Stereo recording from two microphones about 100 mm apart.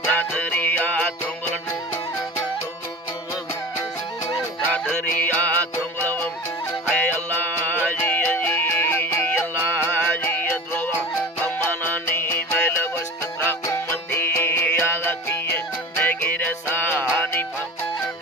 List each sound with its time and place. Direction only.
0.1 s music: 15° left (ahead or behind)
4.4 s music: 15° left (ahead or behind)